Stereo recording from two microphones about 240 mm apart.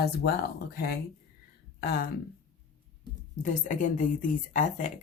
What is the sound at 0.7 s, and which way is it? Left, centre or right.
Speech, left.